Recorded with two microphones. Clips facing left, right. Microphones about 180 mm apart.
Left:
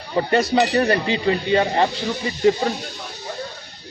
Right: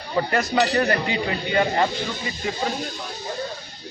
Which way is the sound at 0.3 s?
25° left (ahead or behind).